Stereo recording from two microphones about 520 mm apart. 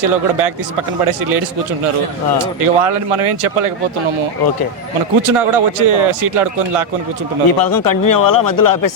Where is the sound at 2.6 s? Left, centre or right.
Right.